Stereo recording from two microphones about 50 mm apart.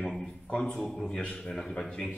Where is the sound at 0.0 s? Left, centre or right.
Centre.